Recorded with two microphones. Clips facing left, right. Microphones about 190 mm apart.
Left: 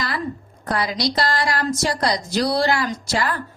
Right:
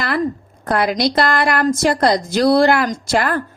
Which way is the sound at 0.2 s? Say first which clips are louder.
Right 8 dB; 55° right (ahead or behind).